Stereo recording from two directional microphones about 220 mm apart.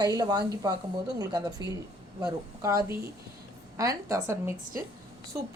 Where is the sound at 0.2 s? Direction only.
15° right (ahead or behind).